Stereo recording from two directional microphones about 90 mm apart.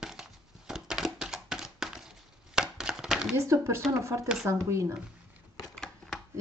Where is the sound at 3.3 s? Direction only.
30° right (ahead or behind).